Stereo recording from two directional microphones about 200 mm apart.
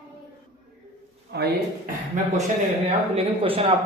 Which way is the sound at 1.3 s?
55° right (ahead or behind).